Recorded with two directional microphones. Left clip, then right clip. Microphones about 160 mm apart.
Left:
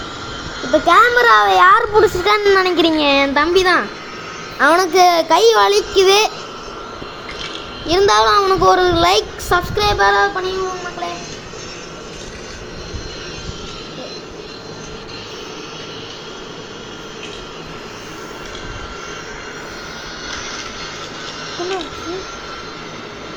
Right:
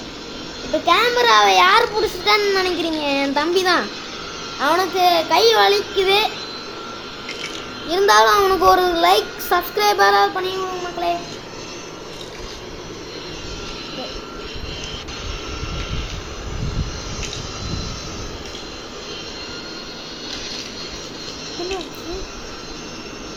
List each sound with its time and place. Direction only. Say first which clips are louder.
0.9 s child singing: left 4 dB; 20° left (ahead or behind)
1.7 s speech: left 5 dB; 25° left (ahead or behind)
3.4 s a child's voice: left 4 dB; 20° left (ahead or behind)
4.6 s a child's voice: left 5 dB; 55° left (ahead or behind)
7.9 s a child's voice: left 1 dB; 20° left (ahead or behind)
8.4 s child singing: left 2 dB; 10° left (ahead or behind)
10.0 s child singing: left 1 dB; centre (ahead or behind)